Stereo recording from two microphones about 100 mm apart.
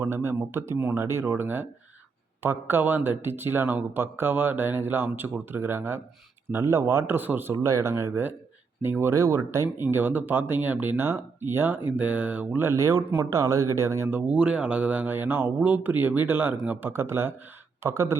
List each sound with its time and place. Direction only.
0.0 s speech: 25° right (ahead or behind)
7.5 s speech: 30° right (ahead or behind)